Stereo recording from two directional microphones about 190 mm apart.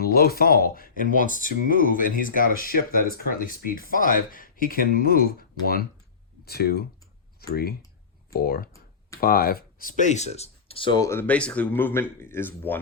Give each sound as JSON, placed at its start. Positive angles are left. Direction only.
{"t": 0.0, "sound": "speech", "side_deg": 55}